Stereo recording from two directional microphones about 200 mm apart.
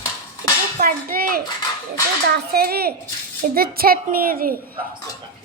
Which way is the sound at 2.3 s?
50° right (ahead or behind).